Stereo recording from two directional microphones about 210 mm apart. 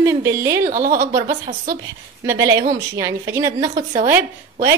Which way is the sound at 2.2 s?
15° right (ahead or behind).